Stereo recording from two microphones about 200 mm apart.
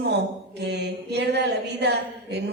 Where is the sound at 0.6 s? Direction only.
60° right (ahead or behind).